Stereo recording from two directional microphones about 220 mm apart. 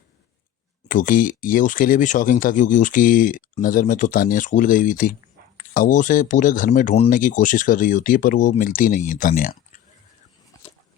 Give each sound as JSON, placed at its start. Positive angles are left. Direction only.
{"t": 0.9, "sound": "speech", "side_deg": 40}